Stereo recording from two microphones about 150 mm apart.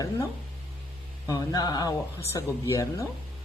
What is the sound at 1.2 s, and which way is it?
Speech, 25° left (ahead or behind).